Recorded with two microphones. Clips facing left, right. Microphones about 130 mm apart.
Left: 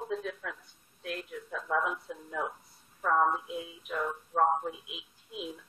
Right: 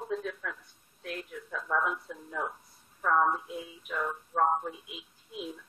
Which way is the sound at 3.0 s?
20° left (ahead or behind).